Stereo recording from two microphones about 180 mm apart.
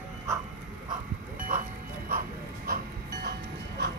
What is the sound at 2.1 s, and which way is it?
Dog, 55° right (ahead or behind).